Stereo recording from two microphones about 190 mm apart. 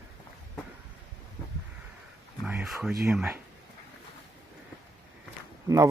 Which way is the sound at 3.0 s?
5° right (ahead or behind).